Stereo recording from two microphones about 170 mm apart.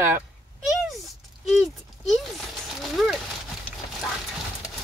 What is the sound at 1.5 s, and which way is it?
Speech, centre (ahead or behind).